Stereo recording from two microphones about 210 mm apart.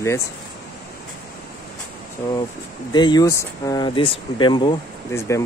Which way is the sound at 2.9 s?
20° left (ahead or behind).